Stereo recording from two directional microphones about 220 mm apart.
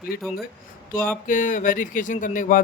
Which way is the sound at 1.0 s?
40° left (ahead or behind).